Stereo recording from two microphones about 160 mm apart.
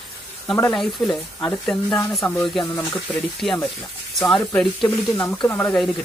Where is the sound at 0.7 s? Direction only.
Centre (ahead or behind).